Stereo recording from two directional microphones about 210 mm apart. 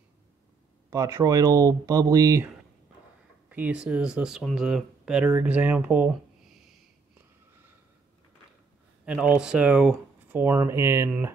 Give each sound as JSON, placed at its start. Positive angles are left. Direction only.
{"t": 0.8, "sound": "speech", "side_deg": -15}
{"t": 9.0, "sound": "speech", "side_deg": -5}